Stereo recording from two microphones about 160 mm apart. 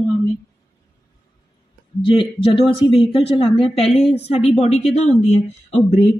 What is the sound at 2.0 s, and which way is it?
Speech, 35° left (ahead or behind).